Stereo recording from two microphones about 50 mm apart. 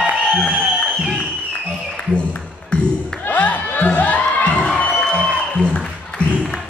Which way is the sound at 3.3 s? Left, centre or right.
Left.